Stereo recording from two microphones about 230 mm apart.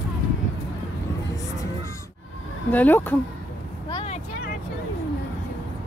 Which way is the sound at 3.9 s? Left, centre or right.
Left.